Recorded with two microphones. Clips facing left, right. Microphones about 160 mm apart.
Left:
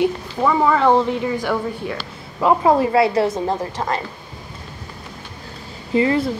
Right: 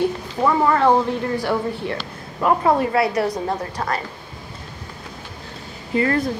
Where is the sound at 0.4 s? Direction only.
Centre (ahead or behind).